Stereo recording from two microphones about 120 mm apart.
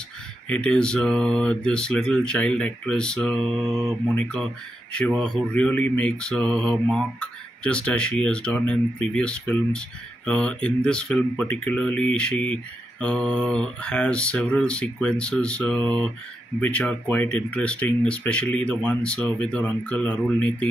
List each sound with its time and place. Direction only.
0.5 s speech: 10° left (ahead or behind)